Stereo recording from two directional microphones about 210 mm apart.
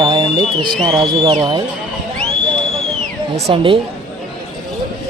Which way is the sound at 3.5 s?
25° right (ahead or behind).